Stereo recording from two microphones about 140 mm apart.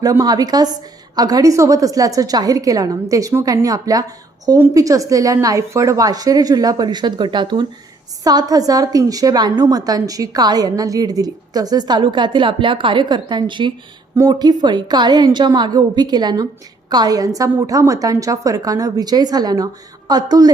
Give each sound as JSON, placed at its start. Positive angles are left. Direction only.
{"t": 0.0, "sound": "a woman's voice", "side_deg": -25}